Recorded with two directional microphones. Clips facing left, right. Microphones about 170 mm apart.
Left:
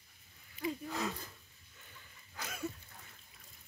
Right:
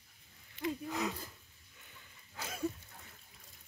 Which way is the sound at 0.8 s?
15° right (ahead or behind).